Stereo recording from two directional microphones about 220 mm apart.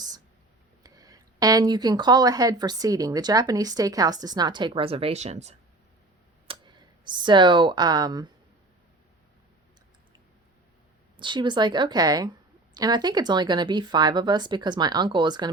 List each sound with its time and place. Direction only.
0.8 s speech: 15° right (ahead or behind)
6.5 s speech: 20° right (ahead or behind)
11.2 s a woman's voice: 20° right (ahead or behind)